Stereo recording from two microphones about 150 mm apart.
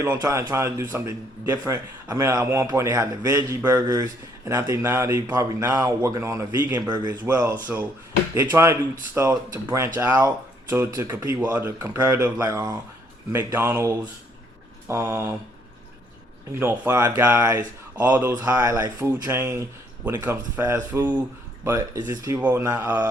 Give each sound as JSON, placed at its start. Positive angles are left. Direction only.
{"t": 0.2, "sound": "a man's voice", "side_deg": -25}
{"t": 7.5, "sound": "a man's voice", "side_deg": -10}
{"t": 16.6, "sound": "a man's voice", "side_deg": -15}